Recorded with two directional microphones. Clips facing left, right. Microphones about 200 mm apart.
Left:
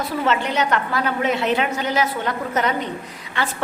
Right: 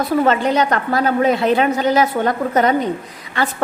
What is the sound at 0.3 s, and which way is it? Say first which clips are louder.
A woman's voice: right 5 dB; 40° right (ahead or behind).